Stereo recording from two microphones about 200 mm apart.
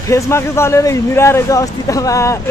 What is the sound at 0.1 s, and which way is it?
A man's voice, 15° left (ahead or behind).